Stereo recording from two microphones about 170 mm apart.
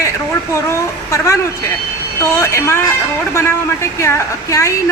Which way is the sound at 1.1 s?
15° left (ahead or behind).